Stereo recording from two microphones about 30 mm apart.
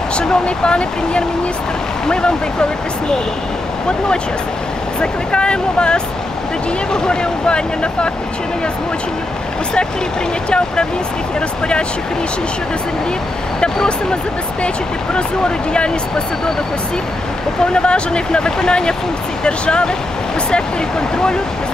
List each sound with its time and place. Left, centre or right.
0.2 s speech: left
5.0 s speech: left
15.1 s speech: left
17.7 s speech: left